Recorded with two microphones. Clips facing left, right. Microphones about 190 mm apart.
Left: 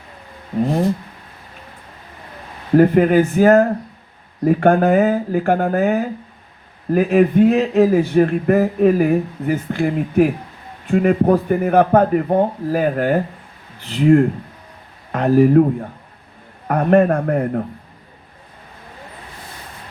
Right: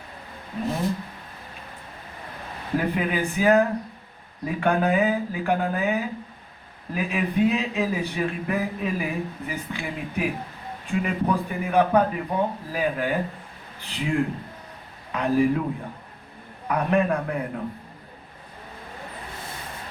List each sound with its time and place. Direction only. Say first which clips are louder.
2.7 s a man's voice: left 13 dB; 50° left (ahead or behind)